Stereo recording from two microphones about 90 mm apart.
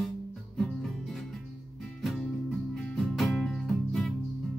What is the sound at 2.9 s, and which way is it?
Music, centre (ahead or behind).